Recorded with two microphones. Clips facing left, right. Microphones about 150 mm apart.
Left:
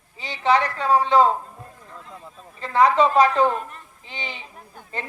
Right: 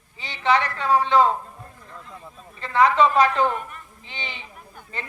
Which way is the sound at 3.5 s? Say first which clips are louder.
Left 2 dB; 35° left (ahead or behind).